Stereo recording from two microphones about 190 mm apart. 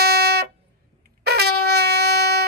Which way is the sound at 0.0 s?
55° right (ahead or behind).